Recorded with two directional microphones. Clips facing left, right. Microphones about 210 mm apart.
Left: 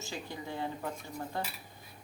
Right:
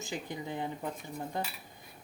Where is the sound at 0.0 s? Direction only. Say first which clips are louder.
Right 2 dB; 15° right (ahead or behind).